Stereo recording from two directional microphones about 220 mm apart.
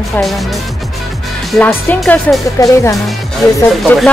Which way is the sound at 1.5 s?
5° left (ahead or behind).